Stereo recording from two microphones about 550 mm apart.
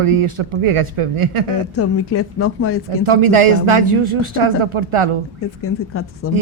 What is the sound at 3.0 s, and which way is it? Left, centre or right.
Speech, right.